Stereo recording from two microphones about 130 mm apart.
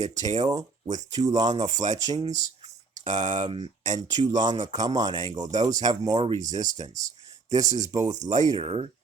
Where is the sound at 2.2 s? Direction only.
65° right (ahead or behind).